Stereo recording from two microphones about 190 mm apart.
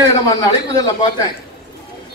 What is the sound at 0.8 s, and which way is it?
Speech, 20° left (ahead or behind).